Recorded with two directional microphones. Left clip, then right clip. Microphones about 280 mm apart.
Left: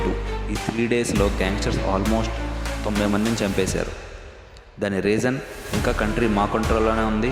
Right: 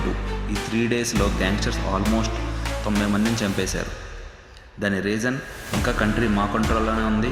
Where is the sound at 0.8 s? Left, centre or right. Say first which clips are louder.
Left 2 dB; left.